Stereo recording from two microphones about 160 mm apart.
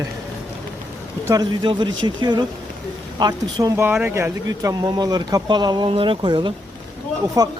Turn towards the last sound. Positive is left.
turn(degrees=-25)  # may be behind; listen again after turning